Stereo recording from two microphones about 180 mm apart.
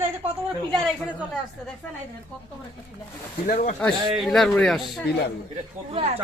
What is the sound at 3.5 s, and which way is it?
Speech, 45° left (ahead or behind).